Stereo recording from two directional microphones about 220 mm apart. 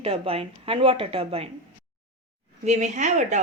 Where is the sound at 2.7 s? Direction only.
35° right (ahead or behind).